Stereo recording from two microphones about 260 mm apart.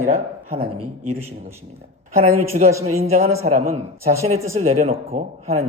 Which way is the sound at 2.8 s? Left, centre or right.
Right.